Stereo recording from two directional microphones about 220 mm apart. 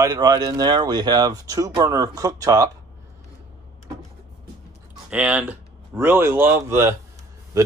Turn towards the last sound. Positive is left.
turn(degrees=-10)  # may be behind; listen again after turning